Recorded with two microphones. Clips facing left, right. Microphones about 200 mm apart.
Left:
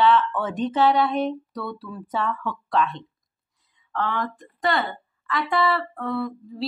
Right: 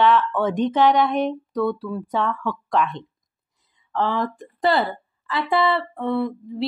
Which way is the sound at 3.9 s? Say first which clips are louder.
Right 4 dB; 25° right (ahead or behind).